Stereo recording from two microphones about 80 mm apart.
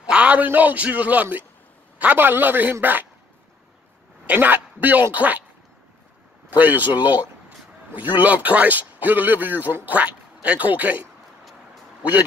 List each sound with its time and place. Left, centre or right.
0.0 s a man's voice: centre
4.3 s speech: right
6.6 s speech: right
8.2 s speech: centre